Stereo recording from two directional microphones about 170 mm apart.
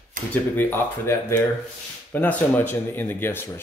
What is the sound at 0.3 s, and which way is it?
Speech, 10° left (ahead or behind).